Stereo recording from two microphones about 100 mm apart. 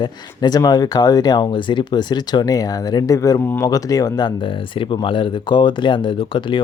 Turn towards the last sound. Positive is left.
turn(degrees=55)  # may be behind; listen again after turning